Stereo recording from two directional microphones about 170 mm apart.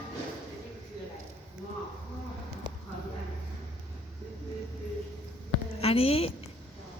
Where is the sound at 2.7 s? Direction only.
25° right (ahead or behind).